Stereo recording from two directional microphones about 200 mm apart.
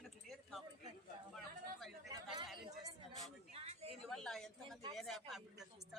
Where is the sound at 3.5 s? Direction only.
30° right (ahead or behind).